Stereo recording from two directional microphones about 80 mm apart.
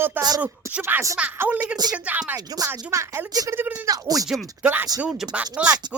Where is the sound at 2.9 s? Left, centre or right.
Right.